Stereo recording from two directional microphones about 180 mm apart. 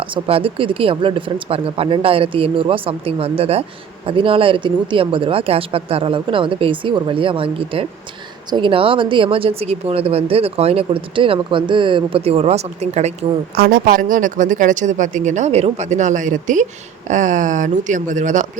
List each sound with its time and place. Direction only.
0.0 s speech: 30° right (ahead or behind)
13.6 s speech: 50° right (ahead or behind)